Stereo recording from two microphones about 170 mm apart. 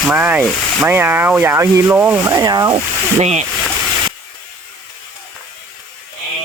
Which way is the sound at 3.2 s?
40° right (ahead or behind).